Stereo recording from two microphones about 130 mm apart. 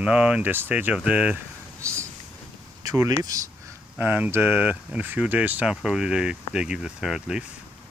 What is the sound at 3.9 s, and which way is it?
Speech, 15° right (ahead or behind).